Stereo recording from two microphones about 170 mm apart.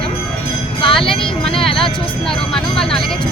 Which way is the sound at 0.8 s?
30° left (ahead or behind).